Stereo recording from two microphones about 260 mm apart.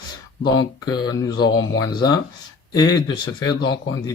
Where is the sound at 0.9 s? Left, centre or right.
Centre.